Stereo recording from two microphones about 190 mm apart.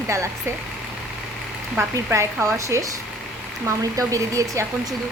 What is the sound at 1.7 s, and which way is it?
Speech, 15° right (ahead or behind).